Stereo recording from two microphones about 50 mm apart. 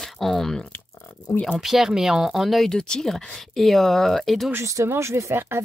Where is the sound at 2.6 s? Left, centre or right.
Centre.